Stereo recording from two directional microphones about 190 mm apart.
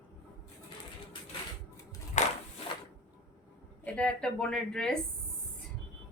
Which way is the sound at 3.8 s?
5° left (ahead or behind).